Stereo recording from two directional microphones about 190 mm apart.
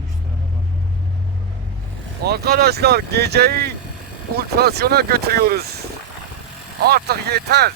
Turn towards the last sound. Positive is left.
turn(degrees=-55)  # may be behind; listen again after turning